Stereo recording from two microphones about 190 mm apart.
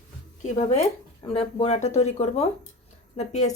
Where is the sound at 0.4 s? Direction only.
40° left (ahead or behind).